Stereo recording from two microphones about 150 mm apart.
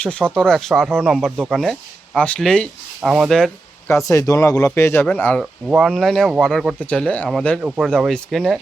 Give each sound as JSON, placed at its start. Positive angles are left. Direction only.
{"t": 0.0, "sound": "speech", "side_deg": 10}
{"t": 4.1, "sound": "speech", "side_deg": 20}
{"t": 5.4, "sound": "speech", "side_deg": 0}